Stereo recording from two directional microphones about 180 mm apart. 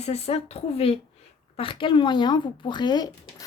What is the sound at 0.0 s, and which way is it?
Speech, 35° left (ahead or behind).